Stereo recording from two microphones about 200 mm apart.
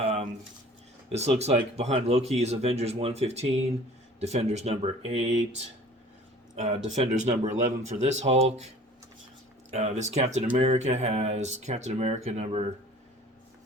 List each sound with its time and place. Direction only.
0.0 s a sound: 30° right (ahead or behind)
1.1 s speech: 30° right (ahead or behind)
6.6 s speech: 35° right (ahead or behind)
9.7 s speech: 35° right (ahead or behind)